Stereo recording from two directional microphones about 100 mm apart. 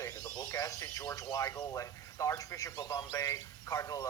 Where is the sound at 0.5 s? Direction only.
35° left (ahead or behind).